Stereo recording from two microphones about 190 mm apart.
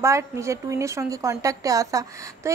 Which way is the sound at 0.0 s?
15° right (ahead or behind).